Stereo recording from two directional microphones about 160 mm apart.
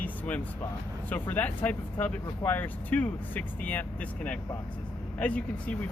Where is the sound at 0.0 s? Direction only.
10° left (ahead or behind).